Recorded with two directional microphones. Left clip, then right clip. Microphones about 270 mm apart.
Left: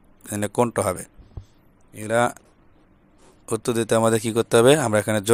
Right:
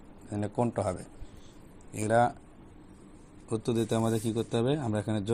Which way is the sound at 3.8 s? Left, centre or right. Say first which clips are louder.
Left 13 dB; left.